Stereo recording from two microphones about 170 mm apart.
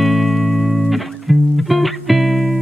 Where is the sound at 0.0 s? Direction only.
Centre (ahead or behind).